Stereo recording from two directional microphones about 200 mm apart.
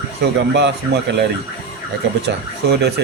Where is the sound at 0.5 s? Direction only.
60° right (ahead or behind).